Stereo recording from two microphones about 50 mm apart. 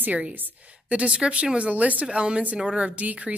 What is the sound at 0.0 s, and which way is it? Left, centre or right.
A woman's voice, right.